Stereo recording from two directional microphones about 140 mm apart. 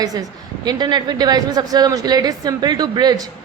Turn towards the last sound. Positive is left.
turn(degrees=-30)  # may be behind; listen again after turning